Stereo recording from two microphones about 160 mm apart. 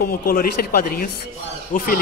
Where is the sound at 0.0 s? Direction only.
65° left (ahead or behind).